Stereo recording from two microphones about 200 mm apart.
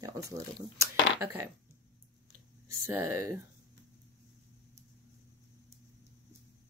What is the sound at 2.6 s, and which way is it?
Speech, 15° right (ahead or behind).